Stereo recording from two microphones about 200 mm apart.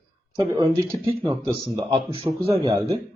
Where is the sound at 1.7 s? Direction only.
25° right (ahead or behind).